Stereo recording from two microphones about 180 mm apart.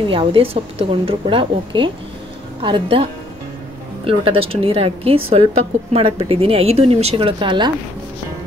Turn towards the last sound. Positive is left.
turn(degrees=-25)  # may be behind; listen again after turning